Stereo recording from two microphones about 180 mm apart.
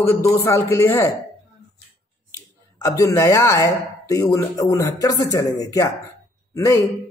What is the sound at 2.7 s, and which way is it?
Speech, 20° left (ahead or behind).